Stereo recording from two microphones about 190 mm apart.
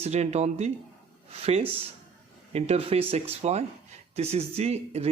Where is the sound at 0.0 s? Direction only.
35° right (ahead or behind).